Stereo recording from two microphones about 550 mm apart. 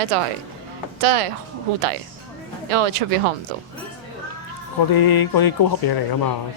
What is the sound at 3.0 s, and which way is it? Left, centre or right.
Speech, right.